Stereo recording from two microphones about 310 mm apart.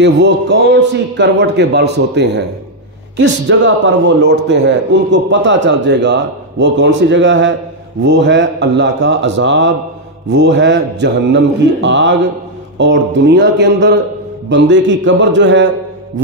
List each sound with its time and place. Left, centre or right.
0.0 s a man's voice: right
3.4 s a man's voice: right